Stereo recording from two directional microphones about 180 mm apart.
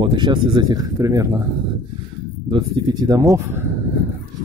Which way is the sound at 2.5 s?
20° right (ahead or behind).